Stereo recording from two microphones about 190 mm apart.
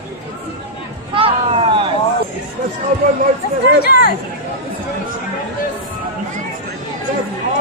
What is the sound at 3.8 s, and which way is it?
Speech, 55° left (ahead or behind).